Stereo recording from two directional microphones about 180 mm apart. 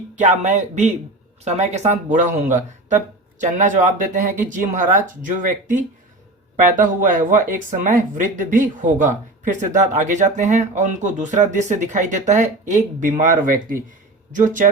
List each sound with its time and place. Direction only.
0.2 s speech: 40° right (ahead or behind)